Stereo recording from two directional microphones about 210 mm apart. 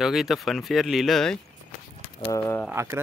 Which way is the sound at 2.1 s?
20° left (ahead or behind).